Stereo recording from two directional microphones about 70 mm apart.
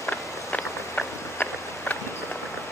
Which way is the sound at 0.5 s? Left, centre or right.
Left.